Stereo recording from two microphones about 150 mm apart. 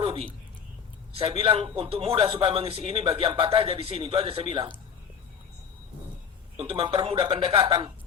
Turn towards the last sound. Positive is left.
turn(degrees=-35)  # may be behind; listen again after turning